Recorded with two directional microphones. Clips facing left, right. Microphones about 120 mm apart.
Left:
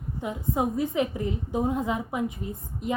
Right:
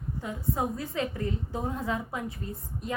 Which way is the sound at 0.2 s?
20° left (ahead or behind).